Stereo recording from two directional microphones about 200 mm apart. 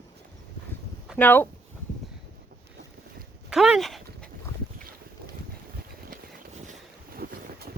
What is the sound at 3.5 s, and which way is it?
Speech, centre (ahead or behind).